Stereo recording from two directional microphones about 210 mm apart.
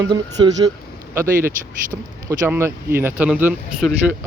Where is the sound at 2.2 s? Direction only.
10° right (ahead or behind).